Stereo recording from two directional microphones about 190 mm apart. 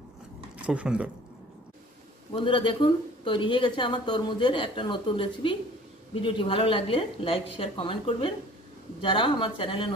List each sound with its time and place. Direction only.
0.6 s speech: 5° right (ahead or behind)
2.3 s a woman's voice: 25° left (ahead or behind)